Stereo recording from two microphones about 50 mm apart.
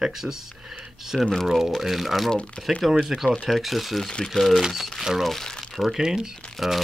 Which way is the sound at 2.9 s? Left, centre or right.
Centre.